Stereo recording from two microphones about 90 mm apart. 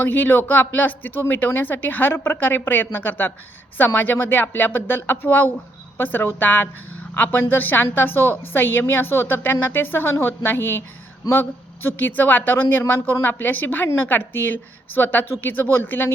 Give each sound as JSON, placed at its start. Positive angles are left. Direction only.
{"t": 0.0, "sound": "speech", "side_deg": 20}